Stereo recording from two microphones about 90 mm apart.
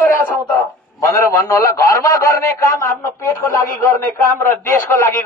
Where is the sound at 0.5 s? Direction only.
35° left (ahead or behind).